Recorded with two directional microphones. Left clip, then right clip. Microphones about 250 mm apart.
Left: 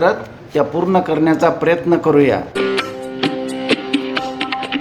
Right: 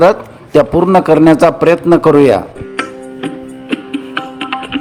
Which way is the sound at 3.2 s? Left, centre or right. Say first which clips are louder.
Left 6 dB; left.